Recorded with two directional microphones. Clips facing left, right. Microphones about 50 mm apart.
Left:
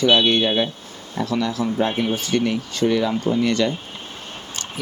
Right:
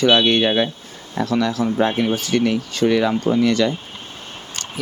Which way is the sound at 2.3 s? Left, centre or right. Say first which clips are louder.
Right 2 dB; right.